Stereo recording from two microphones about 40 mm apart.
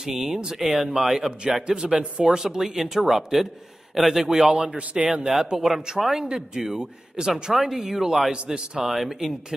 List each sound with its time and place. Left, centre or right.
0.0 s speech: centre
5.2 s speech: centre
8.3 s a man's voice: centre
8.8 s speech: centre